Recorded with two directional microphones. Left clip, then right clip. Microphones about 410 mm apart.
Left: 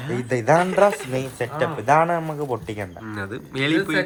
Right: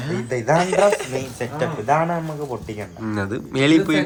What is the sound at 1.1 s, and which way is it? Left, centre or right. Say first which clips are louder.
Speech: even; centre.